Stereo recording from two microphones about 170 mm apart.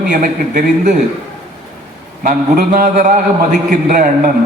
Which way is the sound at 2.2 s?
60° right (ahead or behind).